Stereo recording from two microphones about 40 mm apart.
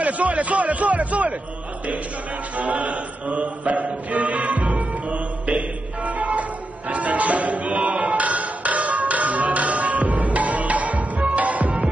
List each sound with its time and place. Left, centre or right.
0.0 s speech: right
2.5 s music: right